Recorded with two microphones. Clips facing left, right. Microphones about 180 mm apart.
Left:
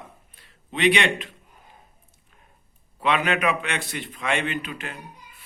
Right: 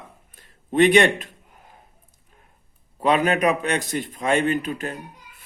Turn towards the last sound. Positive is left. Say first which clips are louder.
# right 7 dB
turn(degrees=-40)  # may be behind; listen again after turning